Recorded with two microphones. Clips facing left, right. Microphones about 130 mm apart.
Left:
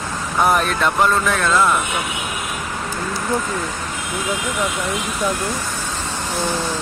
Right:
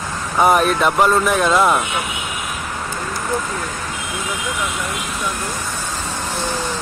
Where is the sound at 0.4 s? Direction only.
5° right (ahead or behind).